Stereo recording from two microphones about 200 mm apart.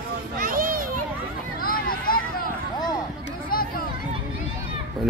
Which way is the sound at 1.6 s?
45° left (ahead or behind).